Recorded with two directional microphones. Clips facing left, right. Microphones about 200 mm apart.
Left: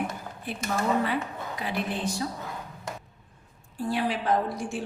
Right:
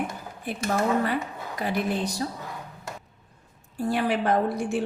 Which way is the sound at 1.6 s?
40° right (ahead or behind).